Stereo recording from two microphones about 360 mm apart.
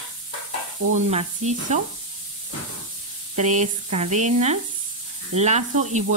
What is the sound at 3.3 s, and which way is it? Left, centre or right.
Speech, centre.